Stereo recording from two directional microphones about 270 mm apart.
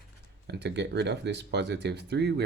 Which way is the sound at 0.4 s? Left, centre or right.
Right.